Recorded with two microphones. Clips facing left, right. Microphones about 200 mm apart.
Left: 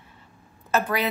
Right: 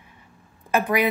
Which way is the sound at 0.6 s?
15° right (ahead or behind).